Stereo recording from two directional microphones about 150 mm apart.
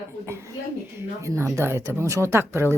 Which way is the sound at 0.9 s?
20° right (ahead or behind).